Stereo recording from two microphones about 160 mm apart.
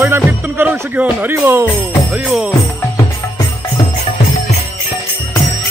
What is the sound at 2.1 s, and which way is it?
Jingle bell, 5° right (ahead or behind).